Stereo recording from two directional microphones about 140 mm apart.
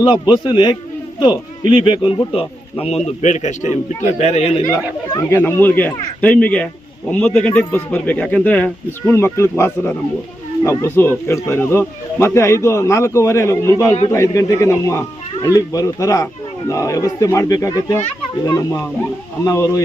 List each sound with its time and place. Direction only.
0.0 s a man's voice: 35° left (ahead or behind)
4.7 s speech: 25° left (ahead or behind)